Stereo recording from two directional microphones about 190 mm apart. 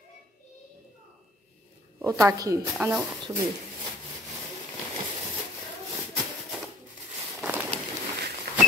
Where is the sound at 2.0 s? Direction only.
10° right (ahead or behind).